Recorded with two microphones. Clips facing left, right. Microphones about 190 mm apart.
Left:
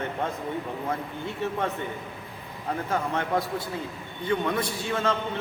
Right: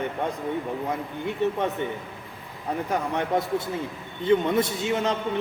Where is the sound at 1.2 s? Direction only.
20° right (ahead or behind).